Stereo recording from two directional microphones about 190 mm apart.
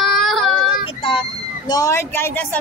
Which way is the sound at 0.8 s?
25° left (ahead or behind).